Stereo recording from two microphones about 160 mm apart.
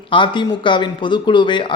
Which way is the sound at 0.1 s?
30° left (ahead or behind).